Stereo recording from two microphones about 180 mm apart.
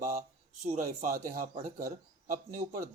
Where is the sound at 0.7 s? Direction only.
45° right (ahead or behind).